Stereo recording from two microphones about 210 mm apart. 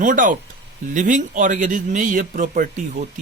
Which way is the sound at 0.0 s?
40° right (ahead or behind).